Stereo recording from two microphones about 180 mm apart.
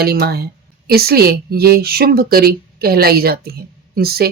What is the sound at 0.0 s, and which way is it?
Speech, 60° right (ahead or behind).